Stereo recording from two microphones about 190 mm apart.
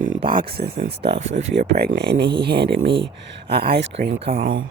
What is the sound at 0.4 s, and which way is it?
Speech, 55° right (ahead or behind).